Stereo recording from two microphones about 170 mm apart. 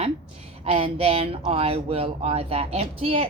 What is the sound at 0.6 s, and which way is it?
Speech, 35° right (ahead or behind).